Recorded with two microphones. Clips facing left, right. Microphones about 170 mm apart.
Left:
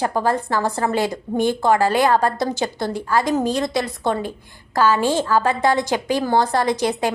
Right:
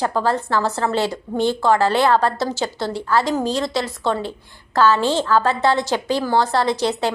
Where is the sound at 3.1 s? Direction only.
15° left (ahead or behind).